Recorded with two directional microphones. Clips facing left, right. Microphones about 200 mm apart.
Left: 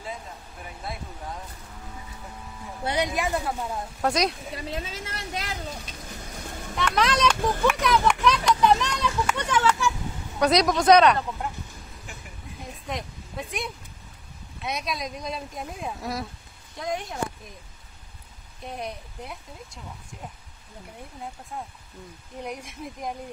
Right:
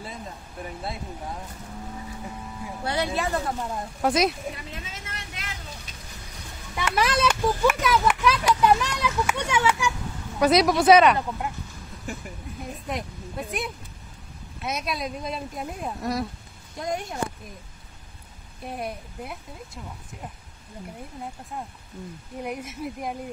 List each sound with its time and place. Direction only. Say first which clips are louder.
2.8 s speech: left 1 dB; 20° left (ahead or behind); by 4.4 s 5° right (ahead or behind)
4.6 s a sound: left 6 dB; 35° left (ahead or behind)
6.8 s speech: even; 10° right (ahead or behind)
7.6 s children playing: even; 5° right (ahead or behind)
10.4 s speech: right 2 dB; 5° right (ahead or behind)
12.8 s speech: right 1 dB; centre (ahead or behind)
18.7 s speech: right 2 dB; 5° right (ahead or behind)
22.4 s speech: right 3 dB; 5° right (ahead or behind)